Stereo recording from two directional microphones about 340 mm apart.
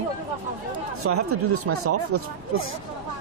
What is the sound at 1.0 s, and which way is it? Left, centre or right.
Speech, right.